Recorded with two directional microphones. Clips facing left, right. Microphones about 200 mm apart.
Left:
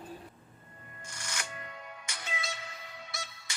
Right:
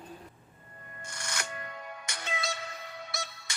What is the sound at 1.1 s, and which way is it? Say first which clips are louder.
Music: right 3 dB; 65° right (ahead or behind).